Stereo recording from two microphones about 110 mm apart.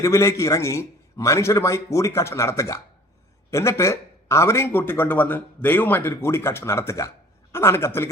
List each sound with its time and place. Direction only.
0.0 s a man's voice: 25° left (ahead or behind)